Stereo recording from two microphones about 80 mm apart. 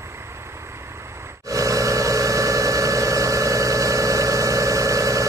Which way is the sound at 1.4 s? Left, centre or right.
Right.